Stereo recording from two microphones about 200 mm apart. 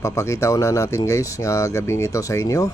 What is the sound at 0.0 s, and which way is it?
Speech, 15° left (ahead or behind).